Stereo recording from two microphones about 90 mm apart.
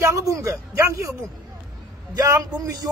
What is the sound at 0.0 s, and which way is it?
Speech, 35° right (ahead or behind).